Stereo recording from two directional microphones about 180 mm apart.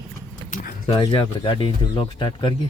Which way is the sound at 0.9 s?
25° left (ahead or behind).